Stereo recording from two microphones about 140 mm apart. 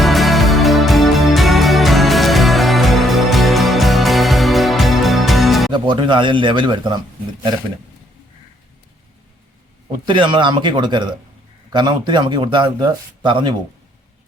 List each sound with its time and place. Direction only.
0.0 s music: centre (ahead or behind)
5.7 s speech: 35° right (ahead or behind)
10.1 s speech: 35° right (ahead or behind)